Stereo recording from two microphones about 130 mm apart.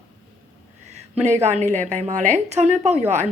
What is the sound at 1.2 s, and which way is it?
Speech, 60° right (ahead or behind).